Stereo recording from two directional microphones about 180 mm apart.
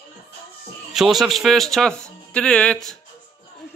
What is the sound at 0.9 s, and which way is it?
Speech, centre (ahead or behind).